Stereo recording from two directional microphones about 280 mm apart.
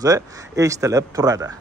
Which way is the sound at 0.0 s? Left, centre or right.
Centre.